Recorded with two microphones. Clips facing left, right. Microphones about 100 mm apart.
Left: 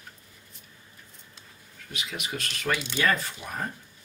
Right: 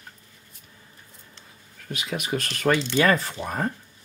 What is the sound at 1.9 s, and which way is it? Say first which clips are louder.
Speech: right 7 dB; 45° right (ahead or behind).